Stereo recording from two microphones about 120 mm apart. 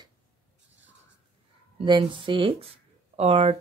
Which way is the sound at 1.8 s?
45° right (ahead or behind).